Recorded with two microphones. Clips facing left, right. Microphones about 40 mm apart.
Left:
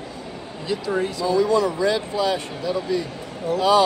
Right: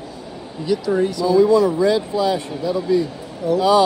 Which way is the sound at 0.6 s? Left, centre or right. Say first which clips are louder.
Right 5 dB; centre.